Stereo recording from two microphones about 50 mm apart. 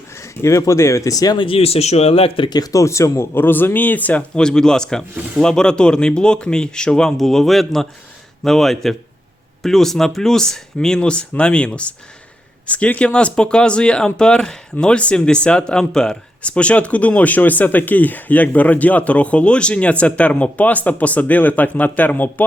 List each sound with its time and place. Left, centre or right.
0.4 s speech: left
2.7 s speech: left
3.3 s speech: left
4.4 s speech: centre
7.2 s a man's voice: centre
16.4 s speech: left